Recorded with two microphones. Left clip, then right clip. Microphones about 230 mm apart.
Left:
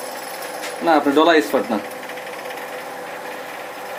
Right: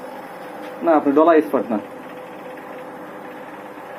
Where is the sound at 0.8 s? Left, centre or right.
Centre.